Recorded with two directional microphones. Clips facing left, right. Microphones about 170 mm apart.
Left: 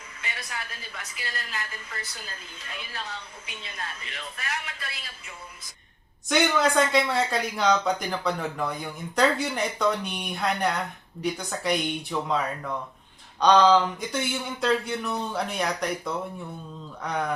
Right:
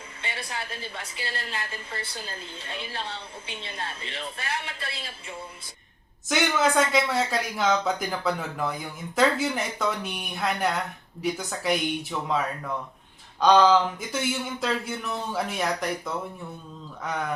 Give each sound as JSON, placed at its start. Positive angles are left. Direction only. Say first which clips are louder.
{"t": 0.2, "sound": "a woman's voice", "louder": "right 3 dB", "side_deg": -30}
{"t": 6.2, "sound": "speech", "louder": "left 1 dB", "side_deg": -5}
{"t": 13.4, "sound": "speech", "louder": "even", "side_deg": -5}